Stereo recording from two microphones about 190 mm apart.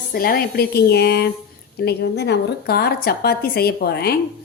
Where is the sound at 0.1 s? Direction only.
50° left (ahead or behind).